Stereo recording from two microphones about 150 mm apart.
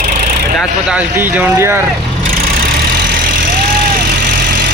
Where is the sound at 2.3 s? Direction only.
85° right; by 4.7 s 60° right (ahead or behind).